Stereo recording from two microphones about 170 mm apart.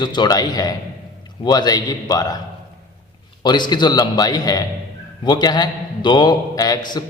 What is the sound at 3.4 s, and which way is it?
A man's voice, 25° left (ahead or behind).